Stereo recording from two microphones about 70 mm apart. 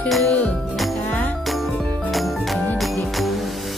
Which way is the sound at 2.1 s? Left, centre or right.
Centre.